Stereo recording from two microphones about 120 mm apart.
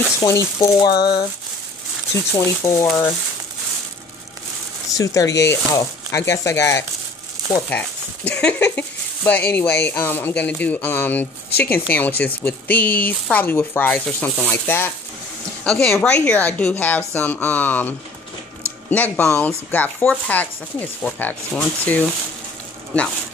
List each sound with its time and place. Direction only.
0.2 s speech: 25° left (ahead or behind)
2.3 s speech: 20° left (ahead or behind)
4.9 s speech: 25° left (ahead or behind)
7.7 s speech: 10° left (ahead or behind)